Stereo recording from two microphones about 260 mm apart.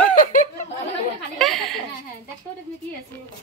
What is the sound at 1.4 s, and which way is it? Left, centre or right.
Laughter, centre.